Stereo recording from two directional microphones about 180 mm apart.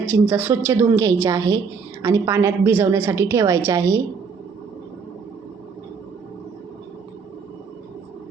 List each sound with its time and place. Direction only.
0.1 s a woman's voice: 10° right (ahead or behind)